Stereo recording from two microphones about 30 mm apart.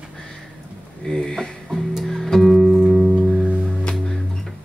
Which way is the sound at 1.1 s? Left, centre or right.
Centre.